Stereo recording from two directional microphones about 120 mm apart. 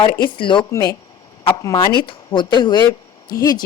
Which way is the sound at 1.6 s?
30° left (ahead or behind).